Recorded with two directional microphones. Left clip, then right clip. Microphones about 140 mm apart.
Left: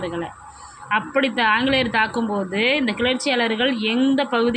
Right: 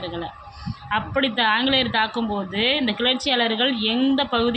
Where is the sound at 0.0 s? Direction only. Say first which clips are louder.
Left 3 dB; 15° left (ahead or behind).